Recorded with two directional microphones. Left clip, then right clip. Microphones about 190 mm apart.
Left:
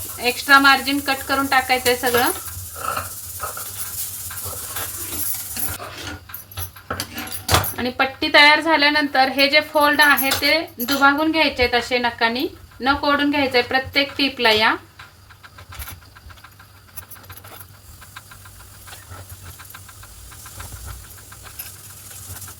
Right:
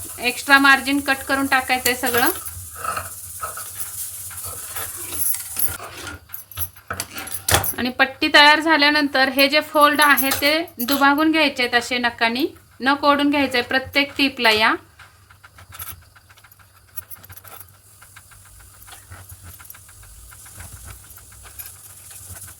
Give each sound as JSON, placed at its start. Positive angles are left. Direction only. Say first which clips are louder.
{"t": 0.2, "sound": "speech", "louder": "left 1 dB", "side_deg": -25}
{"t": 7.1, "sound": "speech", "louder": "even", "side_deg": -30}